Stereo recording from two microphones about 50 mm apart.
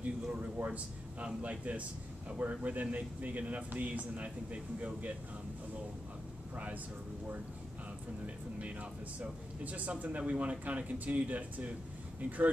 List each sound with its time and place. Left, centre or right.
0.0 s speech: right
6.5 s a man's voice: right
9.2 s speech: right